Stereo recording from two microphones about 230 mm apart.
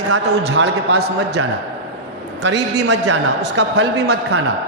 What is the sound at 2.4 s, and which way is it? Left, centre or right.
A man's voice, right.